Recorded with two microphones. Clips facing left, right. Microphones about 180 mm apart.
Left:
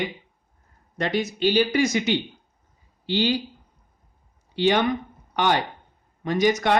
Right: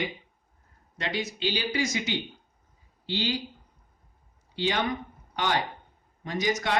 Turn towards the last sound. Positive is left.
turn(degrees=65)  # may be behind; listen again after turning